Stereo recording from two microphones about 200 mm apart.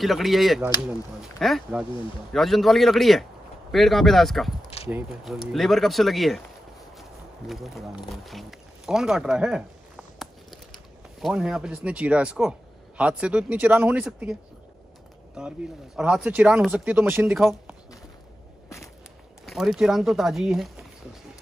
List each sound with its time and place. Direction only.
0.0 s speech: centre (ahead or behind)
11.1 s speech: centre (ahead or behind)
15.4 s speech: 5° right (ahead or behind)
19.4 s speech: centre (ahead or behind)